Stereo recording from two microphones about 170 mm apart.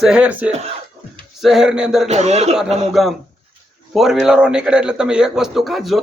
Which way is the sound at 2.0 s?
40° right (ahead or behind).